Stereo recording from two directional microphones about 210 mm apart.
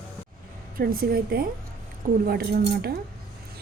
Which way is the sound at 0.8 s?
45° right (ahead or behind).